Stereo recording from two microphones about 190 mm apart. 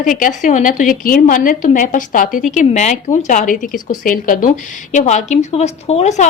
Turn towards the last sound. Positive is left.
turn(degrees=35)  # may be behind; listen again after turning